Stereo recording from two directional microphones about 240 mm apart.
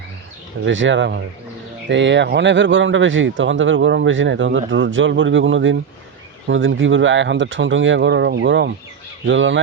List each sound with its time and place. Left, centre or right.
0.6 s speech: right